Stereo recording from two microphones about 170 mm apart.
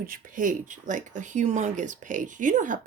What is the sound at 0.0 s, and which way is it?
Speech, 55° right (ahead or behind).